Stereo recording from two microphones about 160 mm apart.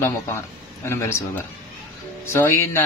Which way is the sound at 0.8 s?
15° left (ahead or behind).